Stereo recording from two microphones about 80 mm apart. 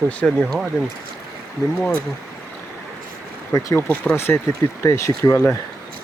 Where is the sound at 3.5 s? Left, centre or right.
Left.